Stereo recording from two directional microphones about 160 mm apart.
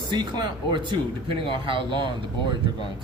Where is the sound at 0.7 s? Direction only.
30° right (ahead or behind).